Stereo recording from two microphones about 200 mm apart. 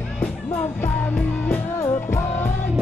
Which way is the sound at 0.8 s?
10° left (ahead or behind).